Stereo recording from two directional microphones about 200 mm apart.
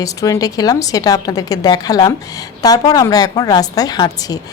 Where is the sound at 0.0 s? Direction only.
15° left (ahead or behind).